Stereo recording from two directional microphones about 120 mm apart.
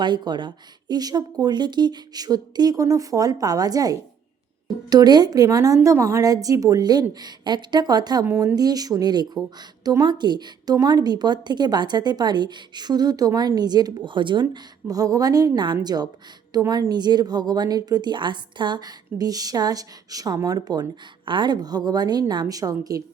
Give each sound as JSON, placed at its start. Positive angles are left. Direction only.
{"t": 0.0, "sound": "a woman's voice", "side_deg": -40}